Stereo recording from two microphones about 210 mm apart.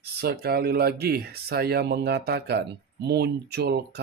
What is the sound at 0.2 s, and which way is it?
Speech, 45° right (ahead or behind).